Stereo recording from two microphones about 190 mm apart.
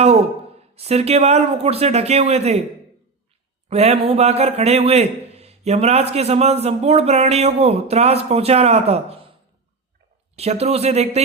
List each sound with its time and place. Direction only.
0.8 s a man's voice: 35° right (ahead or behind)
3.7 s a man's voice: 35° right (ahead or behind)
10.3 s a man's voice: 35° right (ahead or behind)